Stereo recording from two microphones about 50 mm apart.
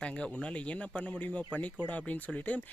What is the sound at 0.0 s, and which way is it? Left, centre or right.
Speech, left.